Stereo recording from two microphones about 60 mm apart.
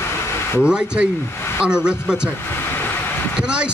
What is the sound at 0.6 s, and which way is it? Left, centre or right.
Speech, centre.